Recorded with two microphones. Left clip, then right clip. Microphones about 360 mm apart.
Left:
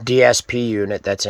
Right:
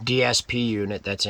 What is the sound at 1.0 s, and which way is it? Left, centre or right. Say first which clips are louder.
Speech: left 6 dB; centre.